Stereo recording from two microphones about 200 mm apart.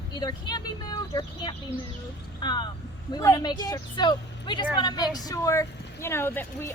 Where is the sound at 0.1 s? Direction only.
20° left (ahead or behind).